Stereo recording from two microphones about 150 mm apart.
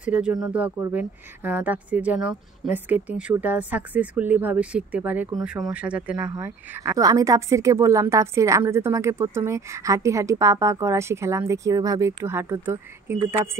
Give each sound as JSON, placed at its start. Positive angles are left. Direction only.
{"t": 0.0, "sound": "speech", "side_deg": -10}